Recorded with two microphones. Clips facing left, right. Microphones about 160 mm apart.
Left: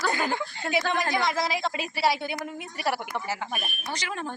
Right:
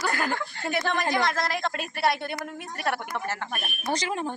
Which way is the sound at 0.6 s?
5° left (ahead or behind).